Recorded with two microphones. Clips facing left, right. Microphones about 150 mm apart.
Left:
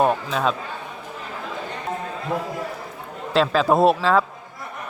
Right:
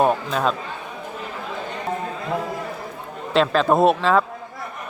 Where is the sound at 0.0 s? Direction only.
Centre (ahead or behind).